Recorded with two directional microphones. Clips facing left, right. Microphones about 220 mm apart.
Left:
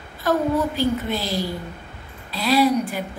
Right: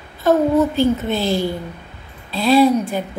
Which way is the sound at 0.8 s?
25° right (ahead or behind).